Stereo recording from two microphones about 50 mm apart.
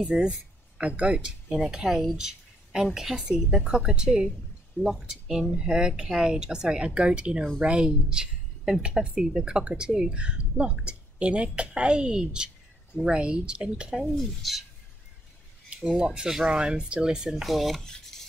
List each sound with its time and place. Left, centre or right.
0.0 s speech: centre
0.7 s speech: right
1.7 s a woman's voice: centre
14.0 s speech: centre
16.0 s speech: centre